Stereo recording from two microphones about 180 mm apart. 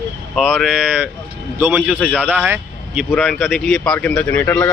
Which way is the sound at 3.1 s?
5° left (ahead or behind).